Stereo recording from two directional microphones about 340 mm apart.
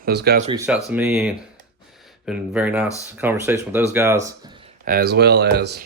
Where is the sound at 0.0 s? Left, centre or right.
Right.